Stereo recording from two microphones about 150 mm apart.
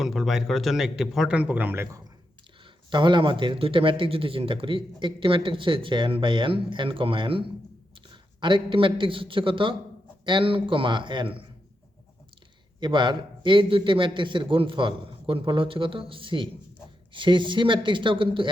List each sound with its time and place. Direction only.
0.0 s a man's voice: centre (ahead or behind); by 2.0 s 15° right (ahead or behind)
2.9 s speech: 30° right (ahead or behind)
12.8 s speech: 30° right (ahead or behind)